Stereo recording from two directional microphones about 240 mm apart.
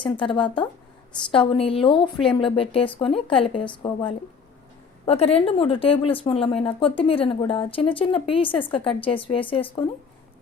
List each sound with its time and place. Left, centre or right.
0.0 s a woman's voice: left